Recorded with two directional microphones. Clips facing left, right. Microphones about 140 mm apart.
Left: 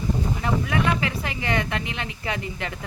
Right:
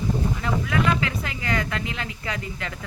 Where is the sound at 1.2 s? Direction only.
25° left (ahead or behind).